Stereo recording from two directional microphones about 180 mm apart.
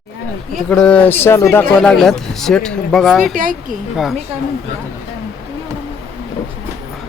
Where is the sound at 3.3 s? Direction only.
50° right (ahead or behind).